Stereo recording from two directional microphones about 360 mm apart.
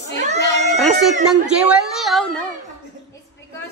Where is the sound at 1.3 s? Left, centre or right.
Centre.